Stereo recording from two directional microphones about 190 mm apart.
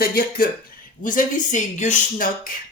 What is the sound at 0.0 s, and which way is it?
Speech, 50° left (ahead or behind).